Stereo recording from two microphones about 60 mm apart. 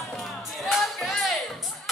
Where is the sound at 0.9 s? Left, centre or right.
Centre.